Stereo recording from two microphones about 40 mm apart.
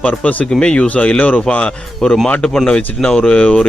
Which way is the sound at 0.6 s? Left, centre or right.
Left.